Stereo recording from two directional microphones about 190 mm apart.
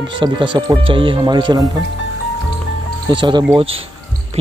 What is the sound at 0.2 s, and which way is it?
Speech, 25° right (ahead or behind).